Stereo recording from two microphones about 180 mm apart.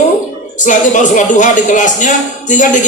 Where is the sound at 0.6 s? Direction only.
45° left (ahead or behind).